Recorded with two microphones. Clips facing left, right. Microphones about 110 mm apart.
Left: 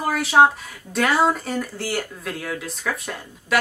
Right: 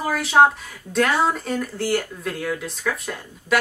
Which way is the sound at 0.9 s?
Centre (ahead or behind).